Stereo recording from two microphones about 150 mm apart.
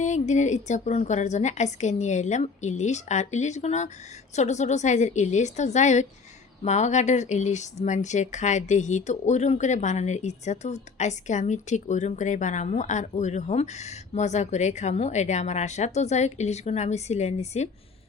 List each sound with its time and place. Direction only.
0.0 s speech: 55° left (ahead or behind)